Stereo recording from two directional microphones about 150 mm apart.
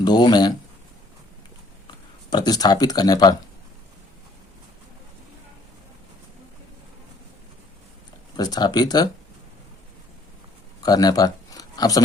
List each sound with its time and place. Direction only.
0.0 s speech: 30° left (ahead or behind)
1.9 s a sound: 30° left (ahead or behind)
8.4 s speech: 25° left (ahead or behind)
10.8 s speech: 25° left (ahead or behind)